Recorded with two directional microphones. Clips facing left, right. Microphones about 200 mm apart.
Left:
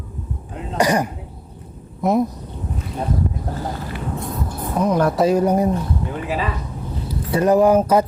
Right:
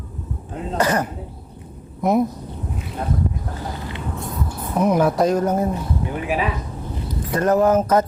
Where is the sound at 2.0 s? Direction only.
Centre (ahead or behind).